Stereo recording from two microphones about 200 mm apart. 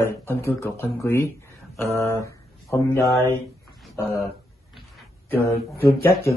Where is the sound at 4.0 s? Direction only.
15° left (ahead or behind).